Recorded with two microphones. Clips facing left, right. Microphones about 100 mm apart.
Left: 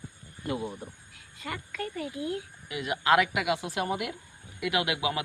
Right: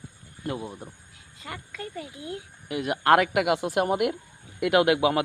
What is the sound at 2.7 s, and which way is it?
A woman's voice, 55° right (ahead or behind).